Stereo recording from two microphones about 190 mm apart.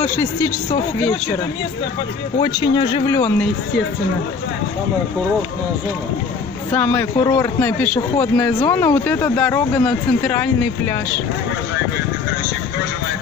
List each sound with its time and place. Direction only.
0.0 s speech: 15° left (ahead or behind)
2.4 s speech: 25° left (ahead or behind)
3.2 s speech: 10° left (ahead or behind)
6.7 s speech: 10° left (ahead or behind)